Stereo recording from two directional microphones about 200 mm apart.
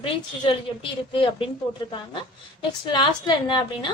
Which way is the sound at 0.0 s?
25° left (ahead or behind).